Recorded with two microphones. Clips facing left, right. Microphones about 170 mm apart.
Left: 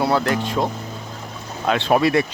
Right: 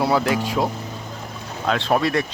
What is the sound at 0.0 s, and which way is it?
Speech, centre (ahead or behind).